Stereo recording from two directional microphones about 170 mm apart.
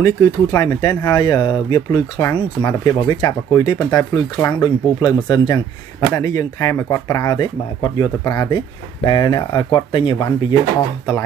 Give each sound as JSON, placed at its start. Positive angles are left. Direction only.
{"t": 0.0, "sound": "speech", "side_deg": 20}